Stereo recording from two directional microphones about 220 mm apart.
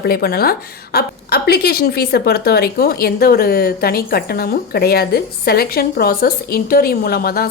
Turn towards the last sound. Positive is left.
turn(degrees=45)  # may be behind; listen again after turning